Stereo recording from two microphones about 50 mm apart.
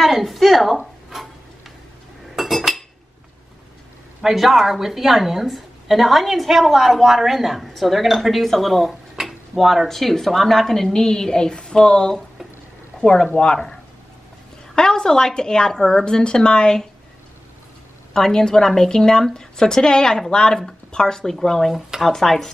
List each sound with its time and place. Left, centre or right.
0.0 s a sound: centre
2.3 s cutlery: centre
4.2 s a woman's voice: centre
14.8 s speech: centre
18.1 s speech: centre
21.7 s a woman's voice: centre